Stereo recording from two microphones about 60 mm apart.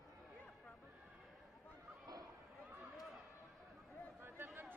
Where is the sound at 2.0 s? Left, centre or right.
Right.